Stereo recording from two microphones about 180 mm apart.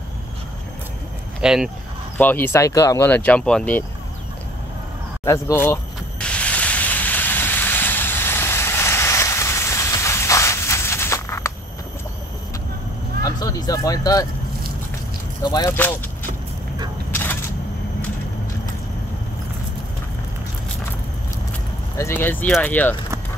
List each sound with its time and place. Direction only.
1.4 s speech: 5° right (ahead or behind)
2.1 s speech: 10° left (ahead or behind)
5.2 s a sound: 15° left (ahead or behind)
13.2 s vehicle: 20° left (ahead or behind)
15.4 s speech: 20° left (ahead or behind)
17.1 s a sound: 10° left (ahead or behind)
21.9 s speech: 15° left (ahead or behind)